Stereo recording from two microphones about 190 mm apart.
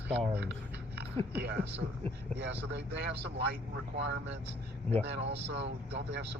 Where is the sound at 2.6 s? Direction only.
65° right (ahead or behind).